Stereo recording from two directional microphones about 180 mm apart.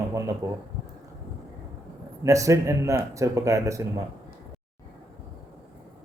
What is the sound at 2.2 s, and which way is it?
Speech, 15° right (ahead or behind).